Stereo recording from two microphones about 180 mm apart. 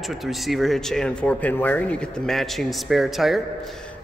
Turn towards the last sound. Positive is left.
turn(degrees=0)  # may be behind; listen again after turning